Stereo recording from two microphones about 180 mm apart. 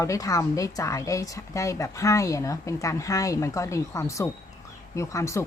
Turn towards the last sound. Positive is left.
turn(degrees=15)  # may be behind; listen again after turning